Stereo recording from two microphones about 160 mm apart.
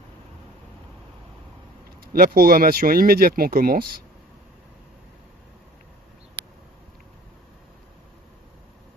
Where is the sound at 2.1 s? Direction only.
65° right (ahead or behind).